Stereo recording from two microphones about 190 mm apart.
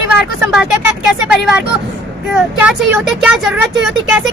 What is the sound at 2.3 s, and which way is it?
Speech, 5° right (ahead or behind).